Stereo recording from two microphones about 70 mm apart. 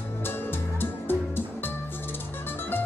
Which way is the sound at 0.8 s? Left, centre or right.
Left.